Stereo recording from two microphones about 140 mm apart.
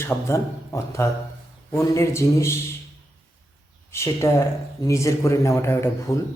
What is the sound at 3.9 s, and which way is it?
Speech, 20° left (ahead or behind).